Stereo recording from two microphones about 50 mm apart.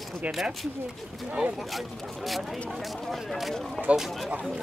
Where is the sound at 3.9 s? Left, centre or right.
Right.